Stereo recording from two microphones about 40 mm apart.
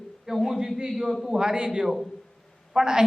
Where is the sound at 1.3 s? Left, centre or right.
Centre.